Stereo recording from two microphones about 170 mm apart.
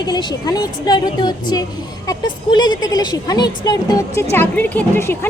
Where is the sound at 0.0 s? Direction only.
25° left (ahead or behind).